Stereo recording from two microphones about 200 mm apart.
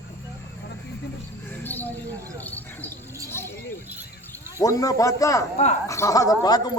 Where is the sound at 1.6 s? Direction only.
10° left (ahead or behind).